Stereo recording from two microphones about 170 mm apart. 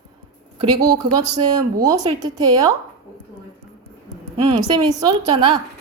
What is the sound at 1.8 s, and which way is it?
Speech, 20° right (ahead or behind).